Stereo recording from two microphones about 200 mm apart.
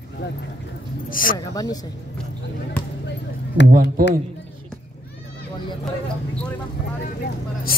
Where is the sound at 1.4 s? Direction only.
20° left (ahead or behind).